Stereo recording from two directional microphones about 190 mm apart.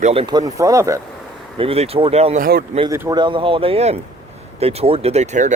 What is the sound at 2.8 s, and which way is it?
Speech, 15° right (ahead or behind).